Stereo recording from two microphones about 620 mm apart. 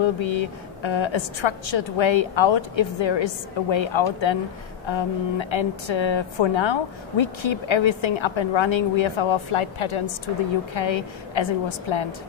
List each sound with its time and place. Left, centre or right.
0.0 s a woman's voice: left